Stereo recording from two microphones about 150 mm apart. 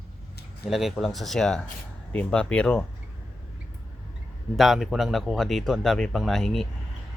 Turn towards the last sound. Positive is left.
turn(degrees=0)  # may be behind; listen again after turning